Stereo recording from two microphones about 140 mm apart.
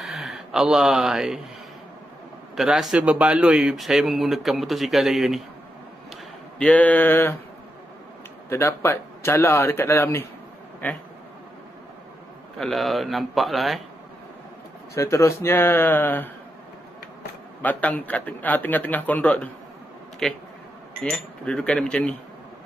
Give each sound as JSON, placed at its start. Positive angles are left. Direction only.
{"t": 0.0, "sound": "speech", "side_deg": 0}
{"t": 2.5, "sound": "a man's voice", "side_deg": 0}
{"t": 6.6, "sound": "a man's voice", "side_deg": 10}
{"t": 8.5, "sound": "speech", "side_deg": 20}
{"t": 12.5, "sound": "a man's voice", "side_deg": 0}
{"t": 15.0, "sound": "a man's voice", "side_deg": 20}
{"t": 17.6, "sound": "a man's voice", "side_deg": 10}